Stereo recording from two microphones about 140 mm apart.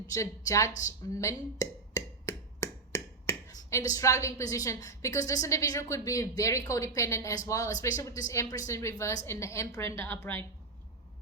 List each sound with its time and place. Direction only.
0.1 s speech: 25° left (ahead or behind)